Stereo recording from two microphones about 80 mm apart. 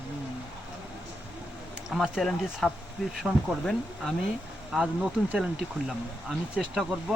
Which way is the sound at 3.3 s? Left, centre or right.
Centre.